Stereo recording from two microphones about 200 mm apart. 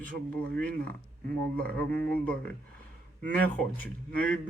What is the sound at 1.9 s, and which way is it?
Speech, 10° left (ahead or behind).